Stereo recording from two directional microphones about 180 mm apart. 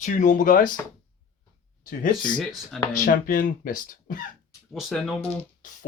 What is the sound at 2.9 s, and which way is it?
Speech, 50° left (ahead or behind).